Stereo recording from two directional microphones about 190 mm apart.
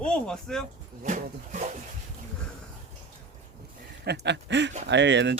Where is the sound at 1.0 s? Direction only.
40° right (ahead or behind).